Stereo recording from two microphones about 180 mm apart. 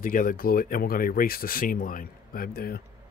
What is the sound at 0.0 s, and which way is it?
Speech, 50° left (ahead or behind).